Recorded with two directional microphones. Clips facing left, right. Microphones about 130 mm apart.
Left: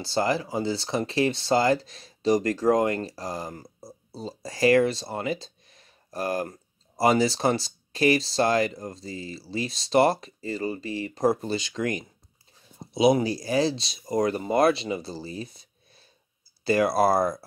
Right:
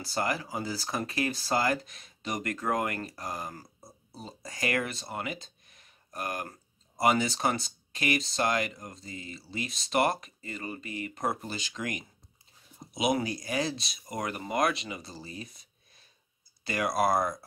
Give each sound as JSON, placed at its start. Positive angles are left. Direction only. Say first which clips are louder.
{"t": 0.0, "sound": "speech", "louder": "left 6 dB", "side_deg": 30}